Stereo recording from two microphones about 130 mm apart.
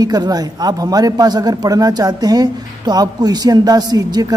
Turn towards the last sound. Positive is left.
turn(degrees=-30)  # may be behind; listen again after turning